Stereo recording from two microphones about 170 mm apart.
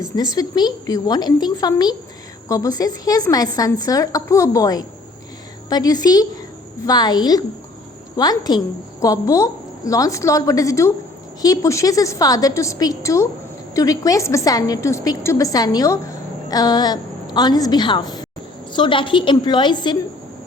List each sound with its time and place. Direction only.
0.3 s a woman's voice: 20° left (ahead or behind)